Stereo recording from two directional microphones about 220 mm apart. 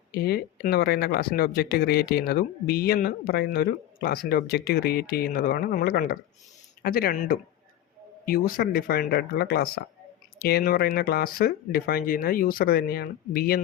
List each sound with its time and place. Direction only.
0.1 s speech: 45° left (ahead or behind)